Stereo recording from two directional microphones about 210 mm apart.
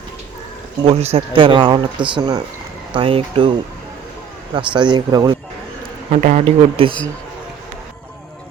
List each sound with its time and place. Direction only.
0.9 s speech: 30° right (ahead or behind)
4.5 s speech: 20° right (ahead or behind)
6.1 s a man's voice: 35° right (ahead or behind)